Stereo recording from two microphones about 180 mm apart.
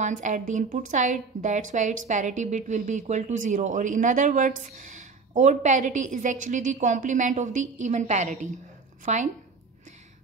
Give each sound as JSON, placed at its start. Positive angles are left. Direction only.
{"t": 0.0, "sound": "a woman's voice", "side_deg": -45}